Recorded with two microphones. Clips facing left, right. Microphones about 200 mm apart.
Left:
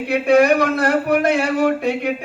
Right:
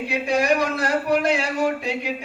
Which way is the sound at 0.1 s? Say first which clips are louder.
Left 8 dB; 60° left (ahead or behind).